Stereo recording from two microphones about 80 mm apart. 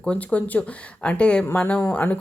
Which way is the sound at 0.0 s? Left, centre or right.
Centre.